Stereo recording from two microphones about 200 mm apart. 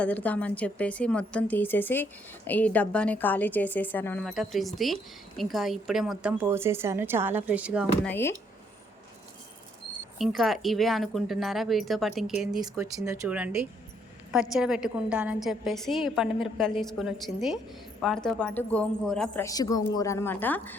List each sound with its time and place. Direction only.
0.0 s a woman's voice: 5° left (ahead or behind)
8.0 s a woman's voice: 10° left (ahead or behind)
10.2 s a woman's voice: centre (ahead or behind)
12.6 s a woman's voice: 15° right (ahead or behind)
14.5 s a woman's voice: 5° right (ahead or behind)
19.5 s a woman's voice: 15° left (ahead or behind)